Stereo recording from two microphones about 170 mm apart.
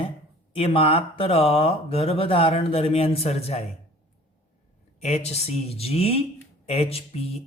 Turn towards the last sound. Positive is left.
turn(degrees=35)  # may be behind; listen again after turning